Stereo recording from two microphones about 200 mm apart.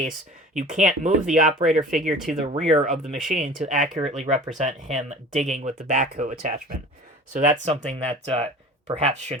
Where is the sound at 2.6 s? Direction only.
35° right (ahead or behind).